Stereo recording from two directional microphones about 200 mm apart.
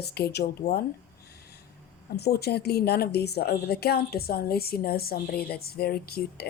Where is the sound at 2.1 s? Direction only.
55° left (ahead or behind).